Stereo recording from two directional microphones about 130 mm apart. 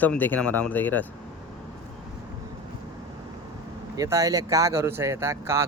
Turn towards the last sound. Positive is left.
turn(degrees=-20)  # may be behind; listen again after turning